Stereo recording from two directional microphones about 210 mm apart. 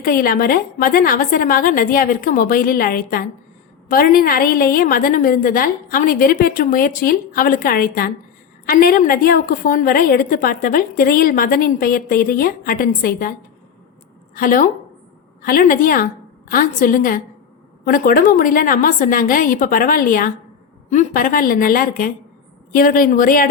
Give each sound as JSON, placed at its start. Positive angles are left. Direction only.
{"t": 0.0, "sound": "a woman's voice", "side_deg": 45}
{"t": 14.3, "sound": "a woman's voice", "side_deg": 40}